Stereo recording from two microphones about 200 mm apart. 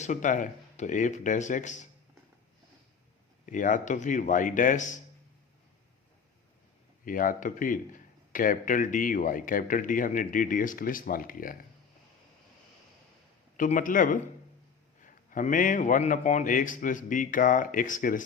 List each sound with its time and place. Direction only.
0.0 s a man's voice: 40° left (ahead or behind)
3.4 s a man's voice: 40° left (ahead or behind)
7.0 s a man's voice: 45° left (ahead or behind)
13.6 s a man's voice: 40° left (ahead or behind)